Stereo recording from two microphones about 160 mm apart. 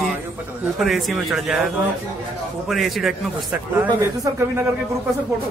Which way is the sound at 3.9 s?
20° right (ahead or behind).